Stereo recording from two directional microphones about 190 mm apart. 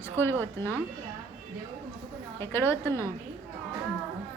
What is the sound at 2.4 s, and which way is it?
Speech, 10° left (ahead or behind).